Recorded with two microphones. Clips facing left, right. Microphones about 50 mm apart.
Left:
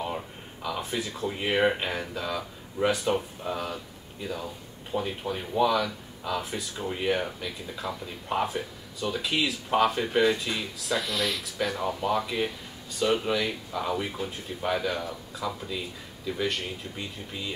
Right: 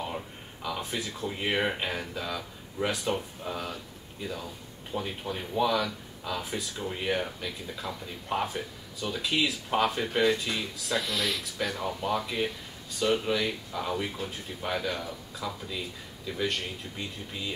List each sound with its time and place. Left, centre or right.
0.0 s speech: centre